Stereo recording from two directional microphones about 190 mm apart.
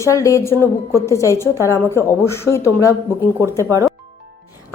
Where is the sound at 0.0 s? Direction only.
15° left (ahead or behind).